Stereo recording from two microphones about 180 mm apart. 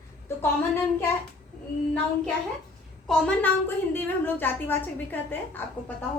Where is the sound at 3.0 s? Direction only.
10° left (ahead or behind).